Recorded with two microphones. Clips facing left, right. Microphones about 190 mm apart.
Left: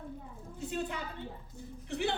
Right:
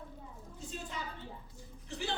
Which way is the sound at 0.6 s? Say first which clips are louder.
Left 7 dB; 60° left (ahead or behind).